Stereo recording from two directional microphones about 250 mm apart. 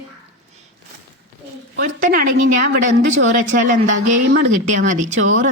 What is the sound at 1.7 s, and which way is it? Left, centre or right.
A woman's voice, right.